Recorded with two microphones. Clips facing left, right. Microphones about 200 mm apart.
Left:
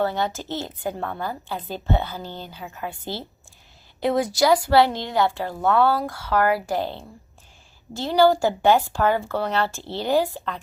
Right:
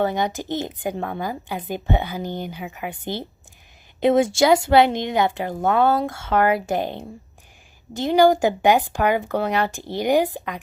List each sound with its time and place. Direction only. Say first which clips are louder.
0.0 s a woman's voice: right 2 dB; 15° right (ahead or behind)